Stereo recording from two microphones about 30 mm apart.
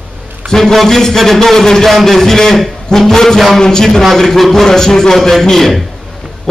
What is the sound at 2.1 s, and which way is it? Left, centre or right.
A man's voice, centre.